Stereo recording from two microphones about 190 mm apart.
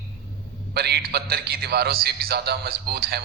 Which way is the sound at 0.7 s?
60° right (ahead or behind).